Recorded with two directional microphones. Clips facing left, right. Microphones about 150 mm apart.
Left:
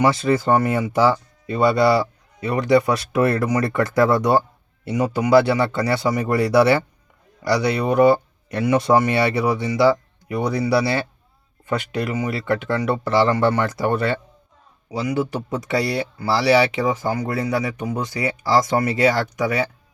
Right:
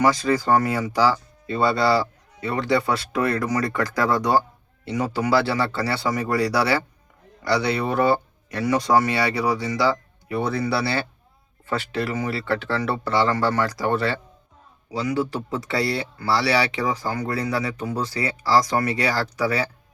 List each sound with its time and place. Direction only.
0.0 s speech: 25° left (ahead or behind)
14.9 s speech: 20° left (ahead or behind)